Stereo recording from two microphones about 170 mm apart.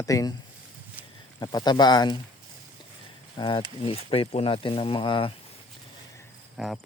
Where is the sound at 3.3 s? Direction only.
30° left (ahead or behind).